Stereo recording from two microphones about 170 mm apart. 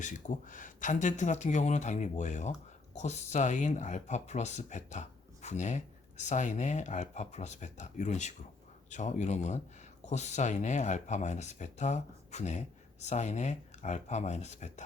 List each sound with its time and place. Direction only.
0.0 s speech: 50° left (ahead or behind)